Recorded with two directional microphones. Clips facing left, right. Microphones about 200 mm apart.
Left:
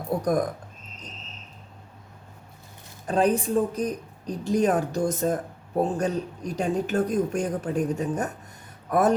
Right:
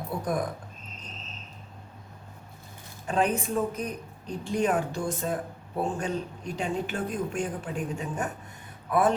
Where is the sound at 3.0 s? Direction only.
40° left (ahead or behind).